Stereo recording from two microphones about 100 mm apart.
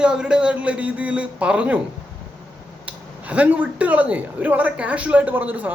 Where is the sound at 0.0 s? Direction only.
10° right (ahead or behind).